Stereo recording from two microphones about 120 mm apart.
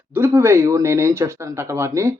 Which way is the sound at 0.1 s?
20° right (ahead or behind).